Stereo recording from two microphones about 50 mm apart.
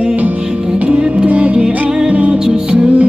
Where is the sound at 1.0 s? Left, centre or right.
Centre.